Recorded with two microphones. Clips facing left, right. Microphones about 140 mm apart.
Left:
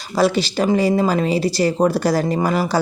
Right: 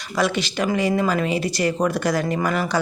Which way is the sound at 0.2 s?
35° left (ahead or behind).